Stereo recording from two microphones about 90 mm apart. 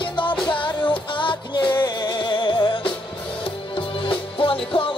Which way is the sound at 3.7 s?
75° left (ahead or behind).